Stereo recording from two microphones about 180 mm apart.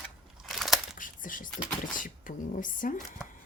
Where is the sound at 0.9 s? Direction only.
50° left (ahead or behind).